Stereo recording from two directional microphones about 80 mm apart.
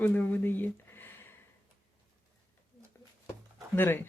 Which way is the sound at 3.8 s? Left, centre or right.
Left.